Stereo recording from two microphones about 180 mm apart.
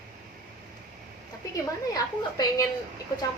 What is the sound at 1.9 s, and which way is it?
Speech, 20° left (ahead or behind).